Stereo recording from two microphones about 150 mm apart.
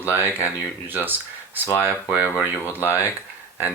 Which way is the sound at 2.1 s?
10° right (ahead or behind).